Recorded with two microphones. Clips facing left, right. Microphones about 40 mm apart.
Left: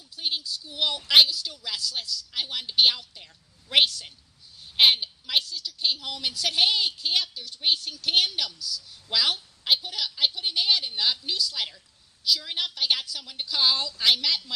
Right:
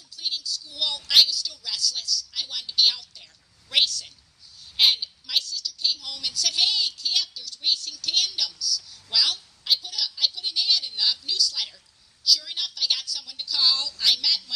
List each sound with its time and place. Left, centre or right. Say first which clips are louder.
0.1 s a woman's voice: left 1 dB; left